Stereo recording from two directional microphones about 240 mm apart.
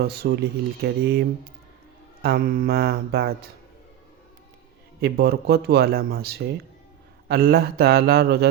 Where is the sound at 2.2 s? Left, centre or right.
Right.